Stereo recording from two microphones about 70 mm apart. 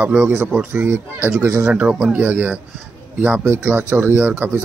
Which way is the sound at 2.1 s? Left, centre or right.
Right.